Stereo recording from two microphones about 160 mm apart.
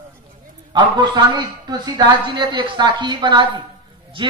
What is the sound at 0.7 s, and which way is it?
A man's voice, 30° right (ahead or behind).